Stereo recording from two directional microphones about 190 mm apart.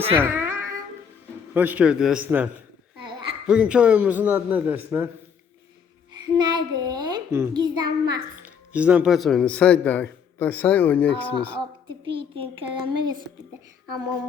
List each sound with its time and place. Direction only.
0.2 s music: 10° right (ahead or behind)
1.5 s speech: 10° right (ahead or behind)
3.0 s a sound: 25° right (ahead or behind)
3.4 s speech: 5° right (ahead or behind)
6.3 s a child's voice: 20° right (ahead or behind)
8.4 s speech: 5° right (ahead or behind); by 11.5 s 10° left (ahead or behind)
11.9 s speech: 30° right (ahead or behind)